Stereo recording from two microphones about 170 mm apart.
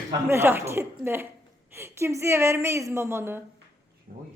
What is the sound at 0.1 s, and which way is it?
A woman's voice, 15° right (ahead or behind).